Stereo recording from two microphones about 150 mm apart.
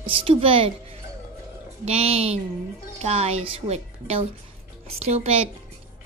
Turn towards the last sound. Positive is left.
turn(degrees=-45)  # may be behind; listen again after turning